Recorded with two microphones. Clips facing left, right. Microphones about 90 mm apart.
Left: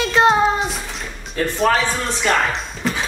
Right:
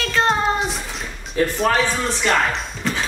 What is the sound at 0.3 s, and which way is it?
Music, centre (ahead or behind).